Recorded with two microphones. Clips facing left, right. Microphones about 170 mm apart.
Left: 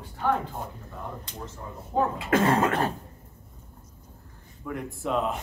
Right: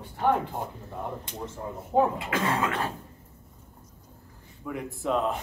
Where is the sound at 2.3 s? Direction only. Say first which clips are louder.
Left 5 dB; 45° left (ahead or behind).